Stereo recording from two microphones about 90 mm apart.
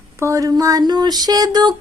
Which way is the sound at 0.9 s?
50° right (ahead or behind).